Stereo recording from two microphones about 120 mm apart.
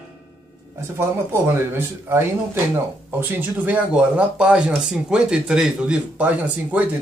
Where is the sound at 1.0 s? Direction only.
20° right (ahead or behind).